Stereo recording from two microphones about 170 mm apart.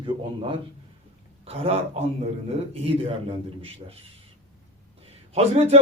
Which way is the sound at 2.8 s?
35° right (ahead or behind).